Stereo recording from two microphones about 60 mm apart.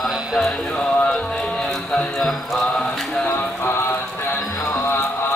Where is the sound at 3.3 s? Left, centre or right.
Left.